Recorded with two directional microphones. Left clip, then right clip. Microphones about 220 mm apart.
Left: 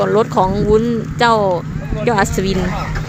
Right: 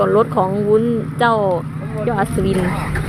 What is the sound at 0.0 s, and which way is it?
Speech, 5° left (ahead or behind).